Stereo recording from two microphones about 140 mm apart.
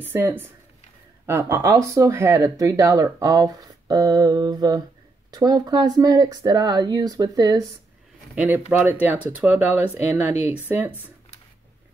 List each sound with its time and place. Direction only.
0.0 s speech: 15° right (ahead or behind)
8.4 s speech: 15° right (ahead or behind)